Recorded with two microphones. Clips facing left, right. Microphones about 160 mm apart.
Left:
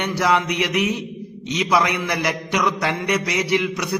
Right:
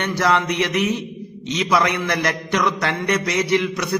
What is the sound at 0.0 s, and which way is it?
A man's voice, 10° left (ahead or behind).